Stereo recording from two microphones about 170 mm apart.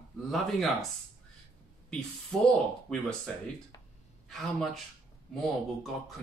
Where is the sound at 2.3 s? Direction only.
Centre (ahead or behind).